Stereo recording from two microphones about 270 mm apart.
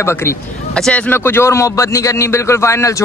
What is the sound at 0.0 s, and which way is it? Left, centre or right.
A man's voice, centre.